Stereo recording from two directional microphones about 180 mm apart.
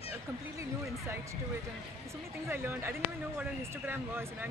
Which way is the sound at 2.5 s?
15° right (ahead or behind).